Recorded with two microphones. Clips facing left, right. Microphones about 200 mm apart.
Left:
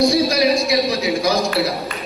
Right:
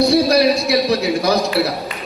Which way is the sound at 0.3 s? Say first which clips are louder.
Right 3 dB; 60° right (ahead or behind).